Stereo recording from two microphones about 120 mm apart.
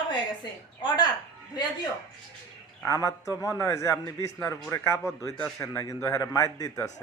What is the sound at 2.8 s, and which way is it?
Speech, 30° left (ahead or behind).